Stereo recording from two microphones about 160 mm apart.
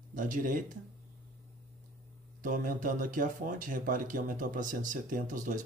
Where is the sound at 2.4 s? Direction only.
60° right (ahead or behind).